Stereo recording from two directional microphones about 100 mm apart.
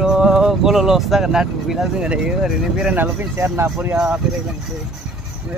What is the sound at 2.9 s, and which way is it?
Speech, 20° right (ahead or behind).